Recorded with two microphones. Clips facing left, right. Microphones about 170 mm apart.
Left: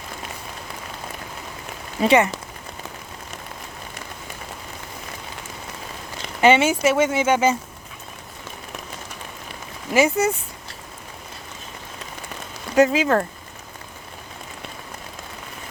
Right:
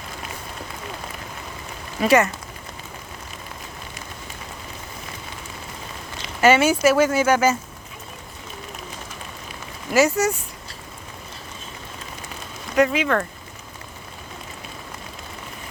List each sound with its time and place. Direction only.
2.0 s speech: 20° left (ahead or behind)
6.4 s speech: 20° left (ahead or behind)
10.0 s speech: 25° left (ahead or behind)
12.7 s speech: 30° left (ahead or behind)